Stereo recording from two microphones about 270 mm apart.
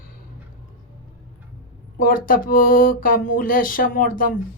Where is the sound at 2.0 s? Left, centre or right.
Left.